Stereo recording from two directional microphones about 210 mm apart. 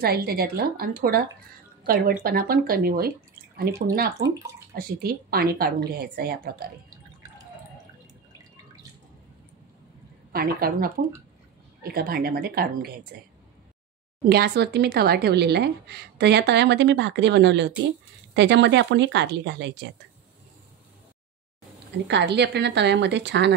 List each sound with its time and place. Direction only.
0.0 s speech: 45° right (ahead or behind)
2.2 s speech: 45° right (ahead or behind)
10.3 s speech: 45° right (ahead or behind)
14.2 s speech: 50° right (ahead or behind)
22.0 s speech: 55° right (ahead or behind)